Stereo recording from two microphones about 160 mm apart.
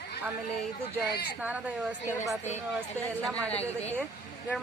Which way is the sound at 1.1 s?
90° left.